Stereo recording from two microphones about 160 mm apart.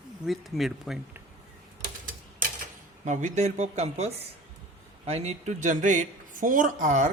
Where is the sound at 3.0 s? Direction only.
50° right (ahead or behind).